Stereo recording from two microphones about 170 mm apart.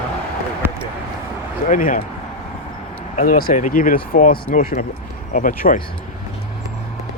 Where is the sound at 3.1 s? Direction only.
55° left (ahead or behind).